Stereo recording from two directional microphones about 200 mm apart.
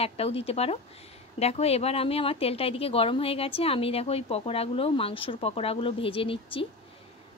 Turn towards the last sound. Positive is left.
turn(degrees=25)  # may be behind; listen again after turning